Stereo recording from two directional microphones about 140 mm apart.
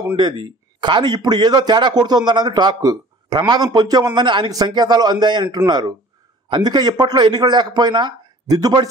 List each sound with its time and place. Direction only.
0.0 s speech: 30° right (ahead or behind)